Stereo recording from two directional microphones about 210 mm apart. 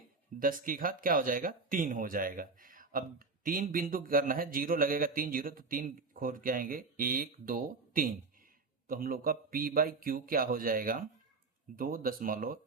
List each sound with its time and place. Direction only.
0.3 s a man's voice: 40° right (ahead or behind)